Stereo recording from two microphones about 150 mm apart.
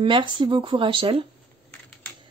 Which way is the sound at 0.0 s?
35° right (ahead or behind).